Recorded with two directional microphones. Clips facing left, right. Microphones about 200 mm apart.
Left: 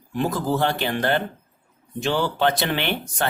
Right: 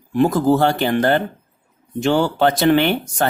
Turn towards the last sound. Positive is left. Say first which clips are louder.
# right 7 dB
turn(degrees=-45)  # may be behind; listen again after turning